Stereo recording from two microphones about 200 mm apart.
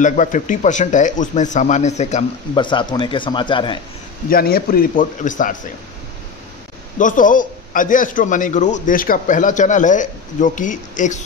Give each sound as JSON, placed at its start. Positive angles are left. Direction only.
{"t": 0.0, "sound": "a man's voice", "side_deg": 40}
{"t": 2.5, "sound": "speech", "side_deg": 25}
{"t": 4.3, "sound": "a man's voice", "side_deg": 50}
{"t": 7.0, "sound": "a man's voice", "side_deg": 40}